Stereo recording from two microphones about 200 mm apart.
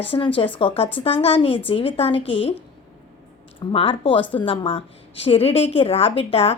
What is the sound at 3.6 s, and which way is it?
A woman's voice, 25° left (ahead or behind).